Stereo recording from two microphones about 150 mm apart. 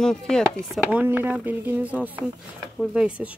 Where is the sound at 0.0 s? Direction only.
5° left (ahead or behind).